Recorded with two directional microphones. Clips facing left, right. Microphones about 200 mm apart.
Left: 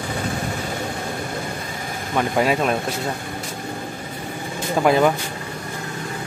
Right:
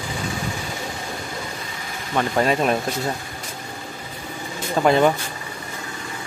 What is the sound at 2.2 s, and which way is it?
Speech, 5° left (ahead or behind).